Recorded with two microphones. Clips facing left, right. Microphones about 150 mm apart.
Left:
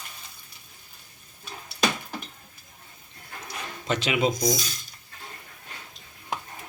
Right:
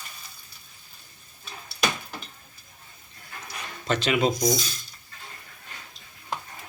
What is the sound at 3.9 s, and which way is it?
Speech, 10° left (ahead or behind).